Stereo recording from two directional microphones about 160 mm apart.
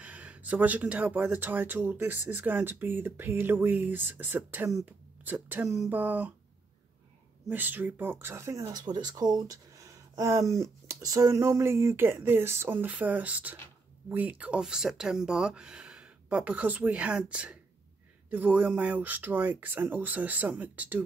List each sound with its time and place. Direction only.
0.0 s speech: 10° right (ahead or behind)
7.4 s speech: 10° right (ahead or behind)